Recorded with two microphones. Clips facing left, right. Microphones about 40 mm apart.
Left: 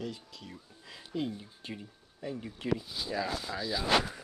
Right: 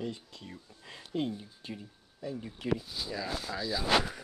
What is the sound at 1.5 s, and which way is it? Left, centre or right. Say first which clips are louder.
Speech: even; centre.